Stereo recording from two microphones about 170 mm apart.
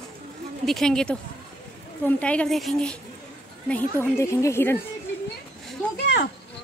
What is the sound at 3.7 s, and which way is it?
A woman's voice, 15° left (ahead or behind).